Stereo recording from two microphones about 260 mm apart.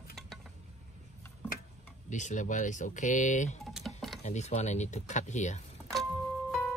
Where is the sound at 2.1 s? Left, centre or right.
Left.